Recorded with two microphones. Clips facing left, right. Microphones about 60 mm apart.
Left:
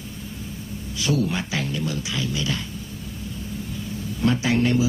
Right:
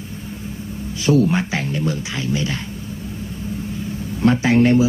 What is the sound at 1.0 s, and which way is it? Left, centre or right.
Speech, right.